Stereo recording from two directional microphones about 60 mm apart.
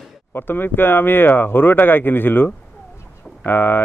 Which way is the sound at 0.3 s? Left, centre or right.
Left.